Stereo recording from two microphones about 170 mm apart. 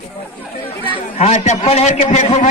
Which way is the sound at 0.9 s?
40° left (ahead or behind).